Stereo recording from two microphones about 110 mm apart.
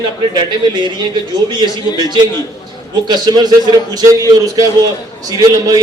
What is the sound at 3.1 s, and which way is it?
A man's voice, 40° right (ahead or behind).